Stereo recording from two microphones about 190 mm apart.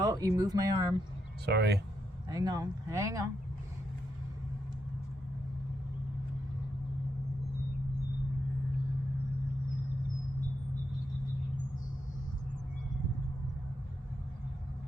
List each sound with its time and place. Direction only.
0.0 s a sound: 20° right (ahead or behind)
0.3 s speech: 20° right (ahead or behind)
1.5 s speech: 60° right (ahead or behind)
2.3 s speech: 20° right (ahead or behind)